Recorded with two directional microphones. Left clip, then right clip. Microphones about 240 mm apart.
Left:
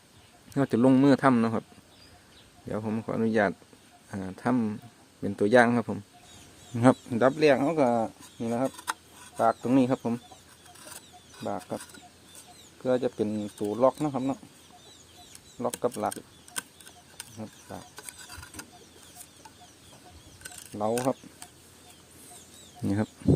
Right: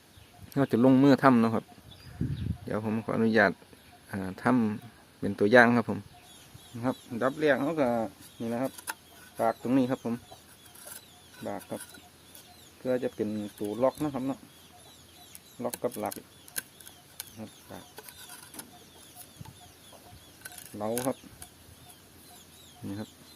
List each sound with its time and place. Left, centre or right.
0.5 s speech: centre
2.6 s speech: centre
6.7 s speech: left
11.4 s speech: left
12.8 s speech: left
15.6 s speech: left
20.7 s speech: left